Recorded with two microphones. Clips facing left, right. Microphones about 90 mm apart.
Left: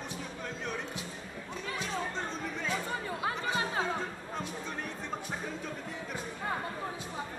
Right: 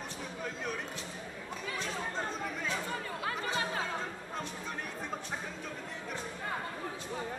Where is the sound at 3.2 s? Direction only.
20° left (ahead or behind).